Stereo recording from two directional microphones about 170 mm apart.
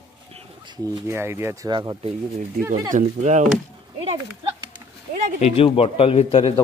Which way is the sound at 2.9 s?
45° right (ahead or behind).